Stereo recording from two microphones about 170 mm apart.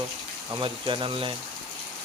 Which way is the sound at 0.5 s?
30° right (ahead or behind).